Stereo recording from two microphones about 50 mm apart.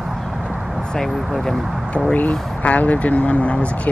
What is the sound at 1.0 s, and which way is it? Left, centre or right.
Speech, centre.